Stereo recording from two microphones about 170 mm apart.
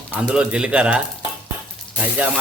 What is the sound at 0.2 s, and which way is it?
Speech, 5° right (ahead or behind).